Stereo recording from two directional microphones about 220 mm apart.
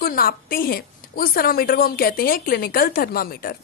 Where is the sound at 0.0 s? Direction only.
40° left (ahead or behind).